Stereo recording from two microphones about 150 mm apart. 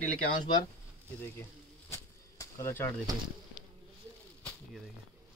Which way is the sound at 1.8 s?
20° left (ahead or behind).